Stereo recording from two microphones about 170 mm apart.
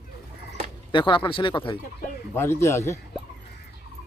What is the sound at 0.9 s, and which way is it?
Speech, 30° left (ahead or behind).